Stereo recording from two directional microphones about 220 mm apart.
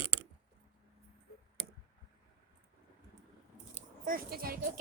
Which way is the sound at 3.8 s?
40° right (ahead or behind).